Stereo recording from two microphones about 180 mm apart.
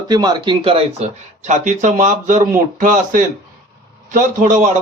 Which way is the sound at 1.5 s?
45° right (ahead or behind).